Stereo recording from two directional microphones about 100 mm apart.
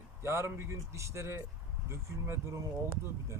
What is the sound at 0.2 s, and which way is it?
Speech, 25° right (ahead or behind).